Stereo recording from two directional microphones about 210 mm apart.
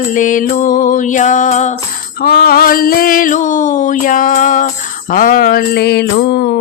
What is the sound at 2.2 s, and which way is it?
Music, 45° left (ahead or behind).